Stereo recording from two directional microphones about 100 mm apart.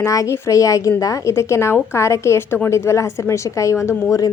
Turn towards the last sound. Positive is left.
turn(degrees=35)  # may be behind; listen again after turning